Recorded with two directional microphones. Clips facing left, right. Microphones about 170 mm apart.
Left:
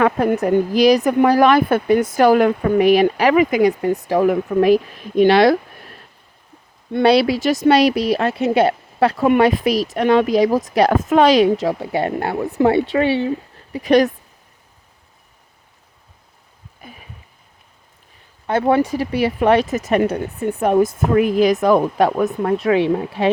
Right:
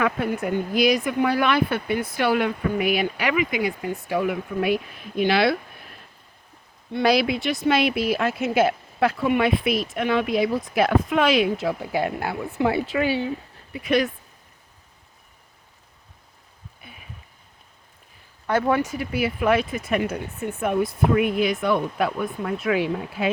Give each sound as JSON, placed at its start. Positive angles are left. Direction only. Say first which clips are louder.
{"t": 0.3, "sound": "speech", "louder": "left 7 dB", "side_deg": 35}
{"t": 7.0, "sound": "speech", "louder": "left 6 dB", "side_deg": 30}
{"t": 12.9, "sound": "speech", "louder": "left 6 dB", "side_deg": 30}
{"t": 18.4, "sound": "speech", "louder": "left 5 dB", "side_deg": 30}